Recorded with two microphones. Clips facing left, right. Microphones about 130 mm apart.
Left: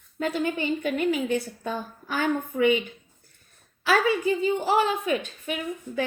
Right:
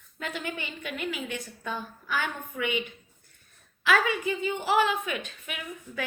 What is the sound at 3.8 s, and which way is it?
Speech, 35° left (ahead or behind).